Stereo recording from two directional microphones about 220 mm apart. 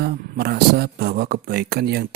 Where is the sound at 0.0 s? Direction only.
45° right (ahead or behind).